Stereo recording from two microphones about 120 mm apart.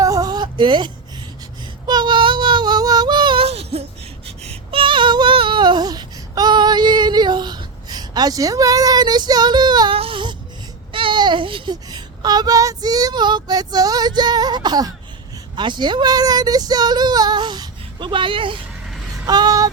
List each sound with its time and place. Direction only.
0.0 s a sound: 30° right (ahead or behind)
1.9 s child singing: 40° right (ahead or behind)
3.4 s baby cry: 55° right (ahead or behind)
4.4 s child singing: 50° right (ahead or behind)
9.9 s a sound: 50° right (ahead or behind)
10.9 s speech: 45° right (ahead or behind)
19.2 s speech: 35° right (ahead or behind)